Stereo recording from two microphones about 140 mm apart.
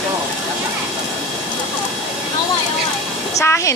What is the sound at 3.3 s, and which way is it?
Speech, 20° left (ahead or behind).